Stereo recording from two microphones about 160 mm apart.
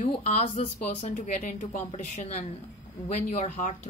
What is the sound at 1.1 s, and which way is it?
A woman's voice, 50° left (ahead or behind).